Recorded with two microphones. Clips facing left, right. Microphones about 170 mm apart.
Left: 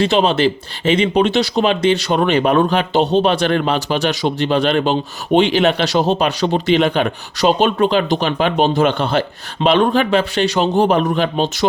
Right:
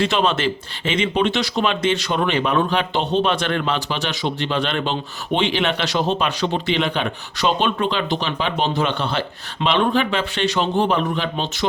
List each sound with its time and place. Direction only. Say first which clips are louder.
0.0 s speech: left 5 dB; 35° left (ahead or behind)